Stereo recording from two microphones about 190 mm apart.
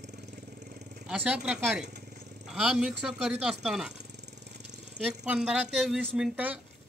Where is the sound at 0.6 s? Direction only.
40° right (ahead or behind).